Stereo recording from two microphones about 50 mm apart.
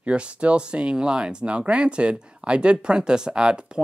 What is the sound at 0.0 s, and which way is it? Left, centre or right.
Speech, right.